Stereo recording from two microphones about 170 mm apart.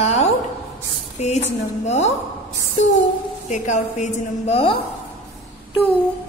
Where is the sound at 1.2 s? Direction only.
40° left (ahead or behind).